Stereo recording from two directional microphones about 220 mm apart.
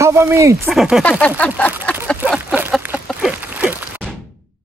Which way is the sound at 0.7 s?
Centre (ahead or behind).